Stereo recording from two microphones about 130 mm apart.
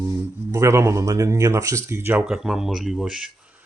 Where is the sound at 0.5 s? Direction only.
25° right (ahead or behind).